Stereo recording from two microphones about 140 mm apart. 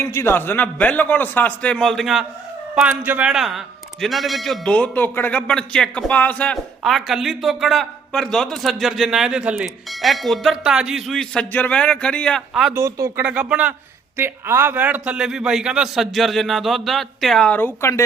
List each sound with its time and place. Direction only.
0.0 s a man's voice: 20° left (ahead or behind)
6.8 s a man's voice: centre (ahead or behind)
12.7 s speech: 20° right (ahead or behind)
13.2 s a man's voice: 10° right (ahead or behind); by 18.0 s 20° left (ahead or behind)